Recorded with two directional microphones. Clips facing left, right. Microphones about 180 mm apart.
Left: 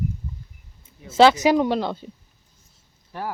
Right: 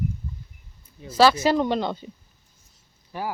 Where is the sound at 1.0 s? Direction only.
20° left (ahead or behind); by 2.1 s centre (ahead or behind).